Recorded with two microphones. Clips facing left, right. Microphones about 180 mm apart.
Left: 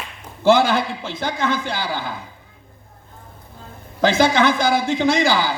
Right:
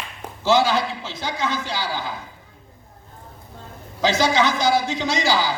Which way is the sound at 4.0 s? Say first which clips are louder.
Left 3 dB; 55° left (ahead or behind).